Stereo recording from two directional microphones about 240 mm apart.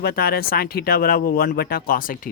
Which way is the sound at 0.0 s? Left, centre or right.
Left.